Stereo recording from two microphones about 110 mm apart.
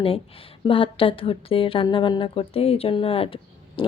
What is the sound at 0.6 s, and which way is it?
A woman's voice, 55° left (ahead or behind).